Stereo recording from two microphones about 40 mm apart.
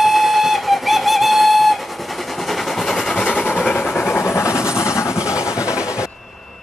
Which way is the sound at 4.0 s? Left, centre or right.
Left.